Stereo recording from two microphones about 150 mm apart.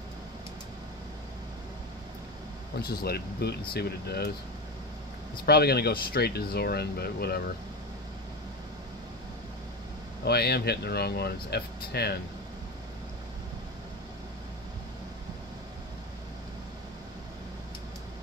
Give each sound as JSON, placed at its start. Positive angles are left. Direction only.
{"t": 2.8, "sound": "speech", "side_deg": 90}
{"t": 5.4, "sound": "speech", "side_deg": 90}
{"t": 10.2, "sound": "speech", "side_deg": 90}